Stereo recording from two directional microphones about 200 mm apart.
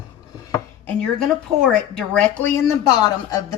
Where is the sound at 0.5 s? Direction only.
5° left (ahead or behind).